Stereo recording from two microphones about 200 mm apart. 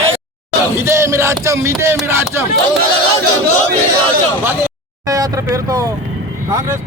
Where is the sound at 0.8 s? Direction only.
15° right (ahead or behind).